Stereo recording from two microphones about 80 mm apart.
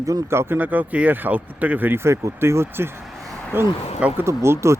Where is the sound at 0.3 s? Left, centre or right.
Right.